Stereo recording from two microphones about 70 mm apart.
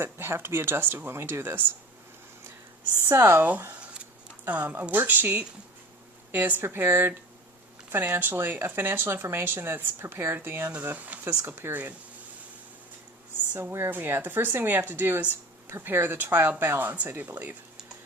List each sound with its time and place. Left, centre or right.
0.0 s speech: right
3.0 s speech: right
4.4 s speech: right
11.3 s speech: right
13.5 s speech: right